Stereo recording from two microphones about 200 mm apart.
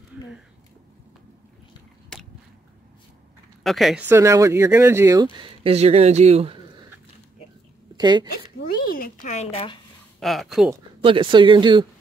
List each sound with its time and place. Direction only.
3.6 s speech: centre (ahead or behind)
4.1 s speech: 15° right (ahead or behind); by 6.6 s 30° right (ahead or behind)
7.9 s speech: 20° right (ahead or behind)
8.5 s speech: 50° left (ahead or behind); by 9.8 s 25° left (ahead or behind)
10.2 s speech: centre (ahead or behind)
10.7 s speech: 25° right (ahead or behind)